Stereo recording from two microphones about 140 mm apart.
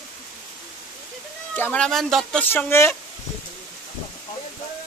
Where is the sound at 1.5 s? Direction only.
10° left (ahead or behind).